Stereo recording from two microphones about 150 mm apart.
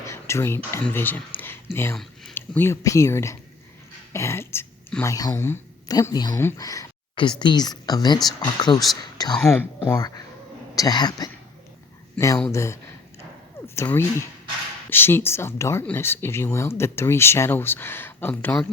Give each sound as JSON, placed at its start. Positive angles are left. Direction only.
{"t": 0.0, "sound": "speech", "side_deg": 20}
{"t": 9.3, "sound": "speech", "side_deg": 5}
{"t": 9.8, "sound": "speech", "side_deg": 15}
{"t": 10.8, "sound": "speech", "side_deg": 25}